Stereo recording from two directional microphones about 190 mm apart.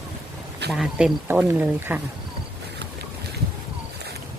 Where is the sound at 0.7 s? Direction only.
5° right (ahead or behind).